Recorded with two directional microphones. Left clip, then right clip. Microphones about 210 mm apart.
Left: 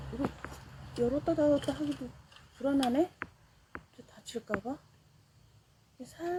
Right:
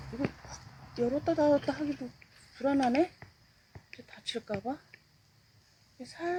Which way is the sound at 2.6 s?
20° right (ahead or behind).